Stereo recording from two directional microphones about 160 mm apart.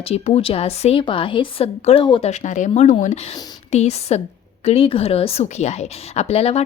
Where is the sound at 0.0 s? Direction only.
40° left (ahead or behind).